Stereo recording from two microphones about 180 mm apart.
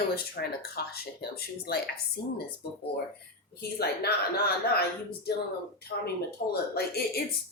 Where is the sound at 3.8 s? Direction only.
60° left (ahead or behind).